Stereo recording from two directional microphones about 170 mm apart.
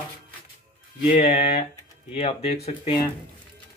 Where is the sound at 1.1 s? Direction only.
40° left (ahead or behind).